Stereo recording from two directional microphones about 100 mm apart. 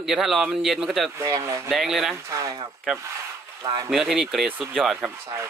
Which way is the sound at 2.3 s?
30° right (ahead or behind).